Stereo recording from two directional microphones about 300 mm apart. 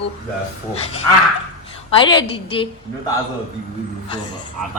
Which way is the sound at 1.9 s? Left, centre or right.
Centre.